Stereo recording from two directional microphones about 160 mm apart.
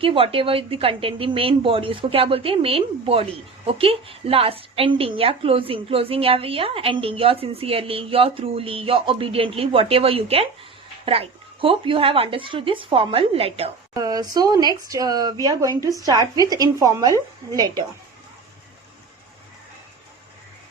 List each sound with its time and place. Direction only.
0.0 s a woman's voice: 35° right (ahead or behind)
13.9 s speech: 25° right (ahead or behind)